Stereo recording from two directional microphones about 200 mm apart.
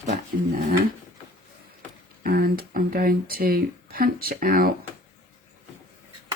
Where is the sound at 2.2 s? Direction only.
45° right (ahead or behind).